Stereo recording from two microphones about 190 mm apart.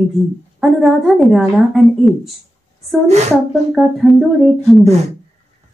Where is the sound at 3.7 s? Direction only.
Centre (ahead or behind).